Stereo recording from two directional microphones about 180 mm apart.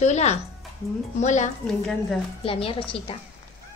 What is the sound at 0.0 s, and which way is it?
A woman's voice, 40° left (ahead or behind).